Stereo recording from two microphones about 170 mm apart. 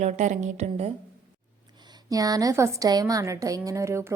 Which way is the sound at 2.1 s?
20° right (ahead or behind).